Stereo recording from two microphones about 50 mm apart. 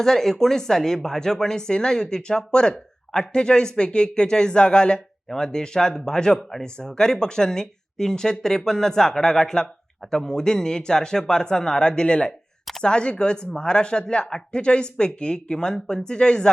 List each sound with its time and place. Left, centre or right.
0.0 s speech: centre